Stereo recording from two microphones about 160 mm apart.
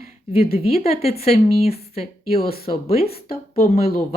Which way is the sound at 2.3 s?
65° left (ahead or behind).